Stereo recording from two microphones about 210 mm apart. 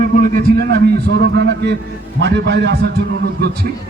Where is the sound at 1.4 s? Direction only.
55° right (ahead or behind).